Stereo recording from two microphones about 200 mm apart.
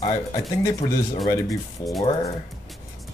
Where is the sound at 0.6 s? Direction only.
15° left (ahead or behind).